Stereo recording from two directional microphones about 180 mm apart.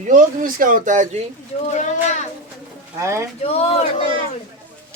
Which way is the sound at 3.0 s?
15° right (ahead or behind).